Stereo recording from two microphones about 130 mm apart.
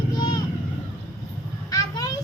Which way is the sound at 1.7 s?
30° left (ahead or behind).